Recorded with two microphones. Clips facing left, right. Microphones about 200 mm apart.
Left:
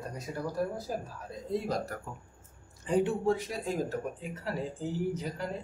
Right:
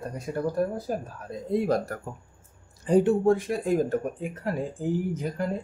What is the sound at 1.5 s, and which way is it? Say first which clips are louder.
Speech: right 7 dB; 55° right (ahead or behind).